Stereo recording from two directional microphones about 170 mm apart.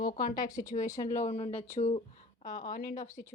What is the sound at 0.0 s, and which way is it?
Speech, 55° left (ahead or behind).